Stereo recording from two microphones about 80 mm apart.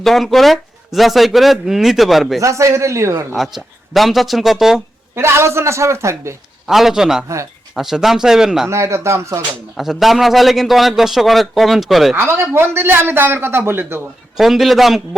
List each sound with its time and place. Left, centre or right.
0.0 s speech: centre
2.4 s a woman's voice: right
3.3 s speech: centre
5.1 s a woman's voice: right
6.7 s speech: centre
8.7 s a woman's voice: right
9.7 s speech: centre
12.1 s speech: right
14.3 s speech: centre